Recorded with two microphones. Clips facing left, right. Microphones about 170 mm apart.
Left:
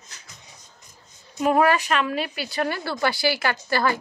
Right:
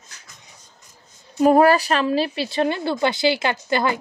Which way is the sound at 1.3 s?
35° right (ahead or behind).